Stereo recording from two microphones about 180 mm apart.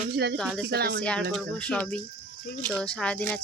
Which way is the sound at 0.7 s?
60° right (ahead or behind).